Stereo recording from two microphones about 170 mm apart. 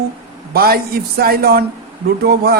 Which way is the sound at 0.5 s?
65° right (ahead or behind).